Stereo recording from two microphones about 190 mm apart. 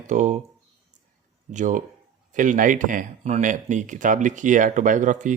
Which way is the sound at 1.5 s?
40° right (ahead or behind).